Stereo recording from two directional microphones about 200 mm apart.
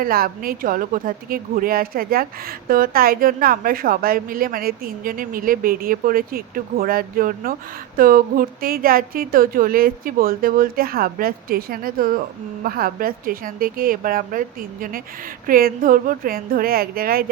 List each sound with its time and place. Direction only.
0.0 s a woman's voice: 45° right (ahead or behind)